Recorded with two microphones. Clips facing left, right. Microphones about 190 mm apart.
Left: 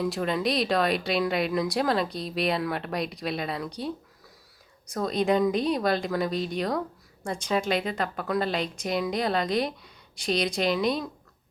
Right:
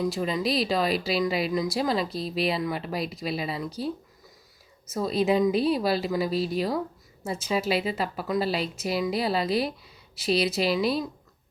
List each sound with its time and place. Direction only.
0.0 s speech: centre (ahead or behind)